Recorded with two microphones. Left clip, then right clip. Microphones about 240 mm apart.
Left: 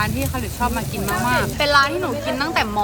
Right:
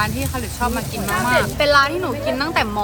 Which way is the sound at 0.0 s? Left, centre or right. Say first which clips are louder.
Right 1 dB; centre.